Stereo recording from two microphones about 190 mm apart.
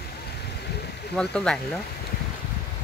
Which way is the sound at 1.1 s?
5° left (ahead or behind).